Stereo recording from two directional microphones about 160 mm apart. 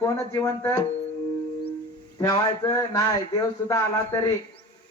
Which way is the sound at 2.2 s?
25° left (ahead or behind).